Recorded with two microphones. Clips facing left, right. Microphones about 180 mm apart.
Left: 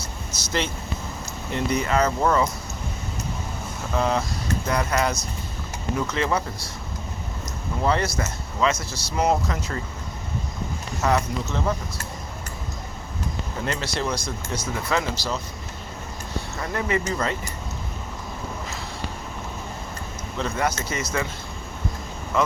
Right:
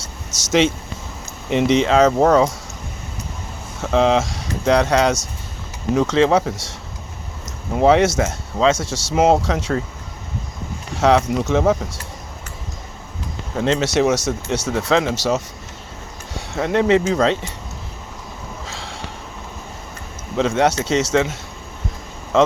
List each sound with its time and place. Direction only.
0.3 s speech: 90° right
3.9 s speech: 90° right
7.8 s speech: 80° right
10.9 s speech: 90° right
13.6 s speech: 90° right
18.7 s a sound: 90° right
20.3 s speech: 85° right
22.3 s speech: 90° right